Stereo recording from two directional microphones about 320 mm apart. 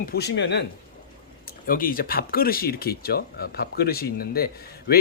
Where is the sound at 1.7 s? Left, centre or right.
Left.